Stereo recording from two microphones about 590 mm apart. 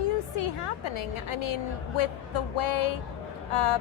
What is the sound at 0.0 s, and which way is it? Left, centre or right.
A woman's voice, left.